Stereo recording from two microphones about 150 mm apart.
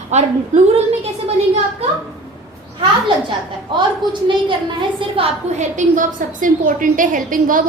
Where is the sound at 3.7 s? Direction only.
30° right (ahead or behind).